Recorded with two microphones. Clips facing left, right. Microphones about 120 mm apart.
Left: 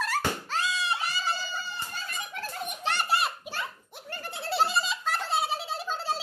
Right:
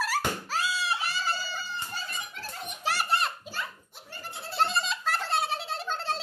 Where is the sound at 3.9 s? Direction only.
60° left (ahead or behind).